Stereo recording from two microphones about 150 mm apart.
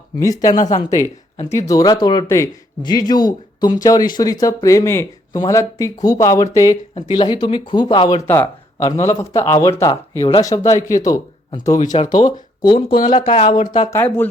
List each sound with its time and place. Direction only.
0.2 s speech: 25° left (ahead or behind)
8.3 s speech: 15° left (ahead or behind)
10.2 s speech: 35° left (ahead or behind)
10.4 s speech: 50° left (ahead or behind)
11.0 s speech: 25° left (ahead or behind)
12.7 s speech: 75° left (ahead or behind)
13.3 s speech: 40° left (ahead or behind)
13.9 s speech: 10° left (ahead or behind)